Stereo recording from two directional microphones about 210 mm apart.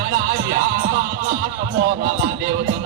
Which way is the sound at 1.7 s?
50° right (ahead or behind).